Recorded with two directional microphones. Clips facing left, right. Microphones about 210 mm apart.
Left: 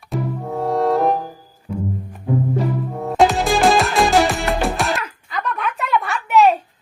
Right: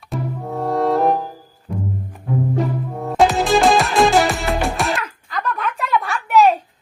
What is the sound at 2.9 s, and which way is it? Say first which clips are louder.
Music: even; centre (ahead or behind).